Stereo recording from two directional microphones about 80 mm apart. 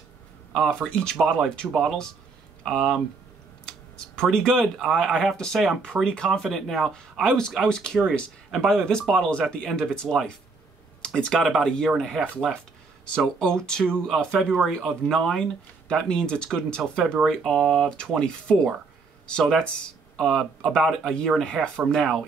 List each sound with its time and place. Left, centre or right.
0.5 s speech: centre